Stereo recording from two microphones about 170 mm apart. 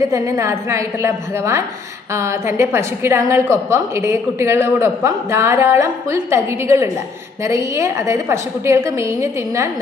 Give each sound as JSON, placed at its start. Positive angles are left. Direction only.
{"t": 0.0, "sound": "a woman's voice", "side_deg": -15}